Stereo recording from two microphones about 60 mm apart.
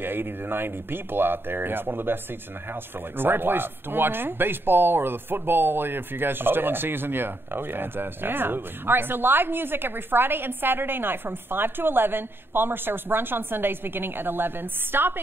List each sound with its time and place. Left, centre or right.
0.0 s speech: right